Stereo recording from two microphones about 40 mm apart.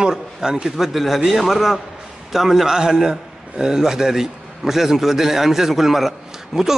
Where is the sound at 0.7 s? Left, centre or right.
Centre.